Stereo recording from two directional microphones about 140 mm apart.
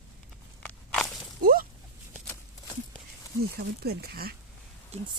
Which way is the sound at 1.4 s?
90° right.